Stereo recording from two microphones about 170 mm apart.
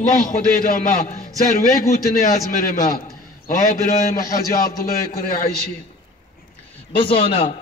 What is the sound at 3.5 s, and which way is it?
Speech, 50° left (ahead or behind).